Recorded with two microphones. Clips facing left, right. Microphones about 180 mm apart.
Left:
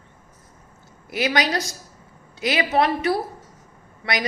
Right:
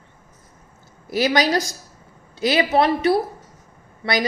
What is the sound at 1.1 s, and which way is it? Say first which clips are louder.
Speech: right 4 dB; 35° right (ahead or behind).